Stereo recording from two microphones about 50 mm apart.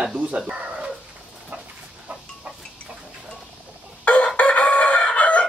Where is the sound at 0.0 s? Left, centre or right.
Right.